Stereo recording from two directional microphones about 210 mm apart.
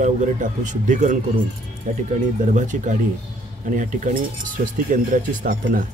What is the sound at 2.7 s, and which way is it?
Speech, 35° right (ahead or behind).